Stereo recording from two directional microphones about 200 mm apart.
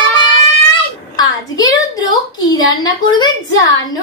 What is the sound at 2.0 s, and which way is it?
A woman's voice, 20° left (ahead or behind).